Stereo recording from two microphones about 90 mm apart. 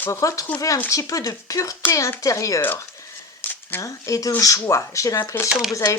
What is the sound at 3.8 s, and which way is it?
Speech, 40° left (ahead or behind).